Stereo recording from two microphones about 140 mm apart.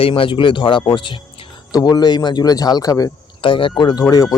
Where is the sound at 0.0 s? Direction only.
40° left (ahead or behind).